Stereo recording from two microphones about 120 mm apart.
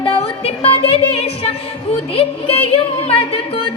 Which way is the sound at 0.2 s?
55° left (ahead or behind).